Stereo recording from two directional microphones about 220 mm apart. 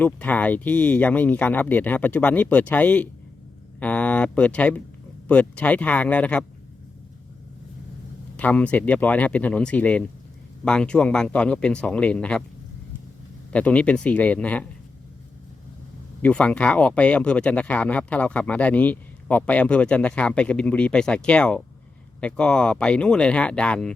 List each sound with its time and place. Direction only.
0.0 s speech: 5° left (ahead or behind)
8.4 s speech: 5° left (ahead or behind)
13.5 s speech: 5° left (ahead or behind)
16.2 s speech: 5° left (ahead or behind)